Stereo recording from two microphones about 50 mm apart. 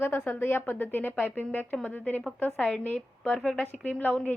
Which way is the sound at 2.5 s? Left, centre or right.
Centre.